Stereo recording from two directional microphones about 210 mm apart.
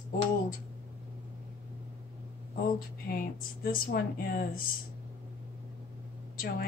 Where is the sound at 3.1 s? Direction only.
45° left (ahead or behind).